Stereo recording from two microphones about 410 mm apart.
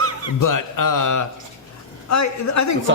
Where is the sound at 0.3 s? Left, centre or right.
Left.